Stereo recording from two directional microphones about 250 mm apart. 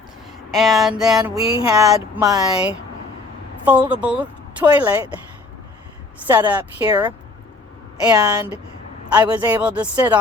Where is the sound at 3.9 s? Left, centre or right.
Centre.